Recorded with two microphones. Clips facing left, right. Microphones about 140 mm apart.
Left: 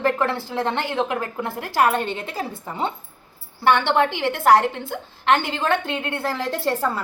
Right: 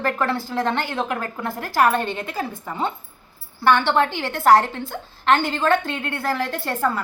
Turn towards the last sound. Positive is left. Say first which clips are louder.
# left 1 dB
turn(degrees=30)  # may be behind; listen again after turning